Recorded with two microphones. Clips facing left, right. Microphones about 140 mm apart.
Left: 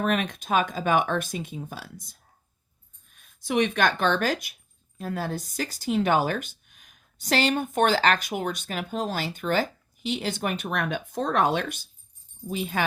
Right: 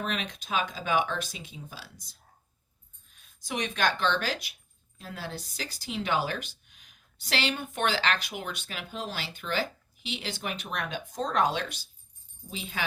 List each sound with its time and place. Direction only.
0.0 s speech: 55° left (ahead or behind)